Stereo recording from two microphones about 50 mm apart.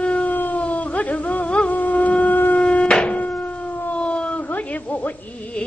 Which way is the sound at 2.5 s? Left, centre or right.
Left.